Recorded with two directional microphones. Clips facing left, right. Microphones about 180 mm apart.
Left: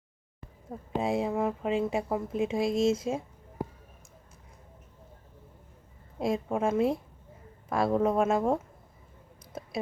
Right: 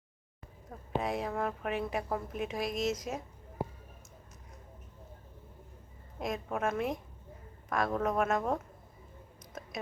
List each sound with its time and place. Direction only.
0.9 s a woman's voice: 25° left (ahead or behind)
6.1 s a woman's voice: 30° left (ahead or behind)